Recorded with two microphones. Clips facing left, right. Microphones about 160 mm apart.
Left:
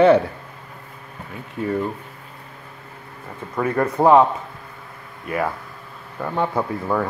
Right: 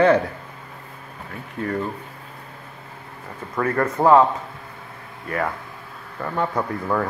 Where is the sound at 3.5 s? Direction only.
10° left (ahead or behind).